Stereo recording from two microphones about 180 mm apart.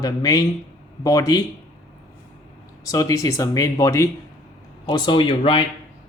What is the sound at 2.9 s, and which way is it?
Speech, 20° left (ahead or behind).